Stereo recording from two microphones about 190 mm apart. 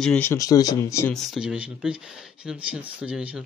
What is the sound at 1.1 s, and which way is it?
Speech, centre (ahead or behind).